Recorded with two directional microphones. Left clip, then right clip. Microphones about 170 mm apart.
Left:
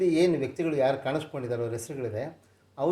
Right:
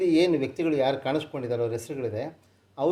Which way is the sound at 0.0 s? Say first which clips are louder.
Right 2 dB; 35° right (ahead or behind).